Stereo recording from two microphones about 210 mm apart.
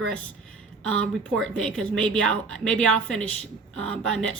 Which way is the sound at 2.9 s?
75° right (ahead or behind).